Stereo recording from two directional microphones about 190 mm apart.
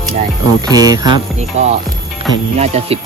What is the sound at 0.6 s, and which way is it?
Speech, 20° right (ahead or behind).